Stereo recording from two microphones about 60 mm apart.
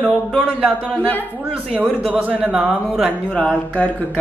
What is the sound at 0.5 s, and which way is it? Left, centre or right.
Speech, right.